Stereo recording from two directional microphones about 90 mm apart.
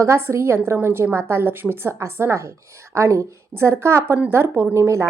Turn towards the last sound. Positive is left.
turn(degrees=-30)  # may be behind; listen again after turning